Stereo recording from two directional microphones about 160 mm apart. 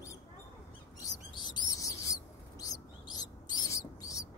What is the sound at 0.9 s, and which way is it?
Bird, 25° left (ahead or behind).